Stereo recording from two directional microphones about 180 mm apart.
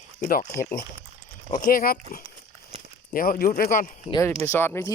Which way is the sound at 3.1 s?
50° left (ahead or behind).